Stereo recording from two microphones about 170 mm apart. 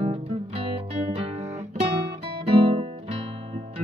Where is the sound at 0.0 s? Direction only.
35° right (ahead or behind).